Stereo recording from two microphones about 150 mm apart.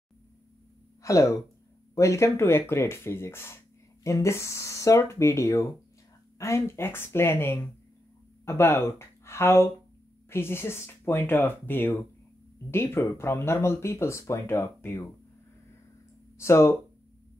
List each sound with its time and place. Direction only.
1.0 s speech: 20° left (ahead or behind)
16.3 s speech: 20° left (ahead or behind)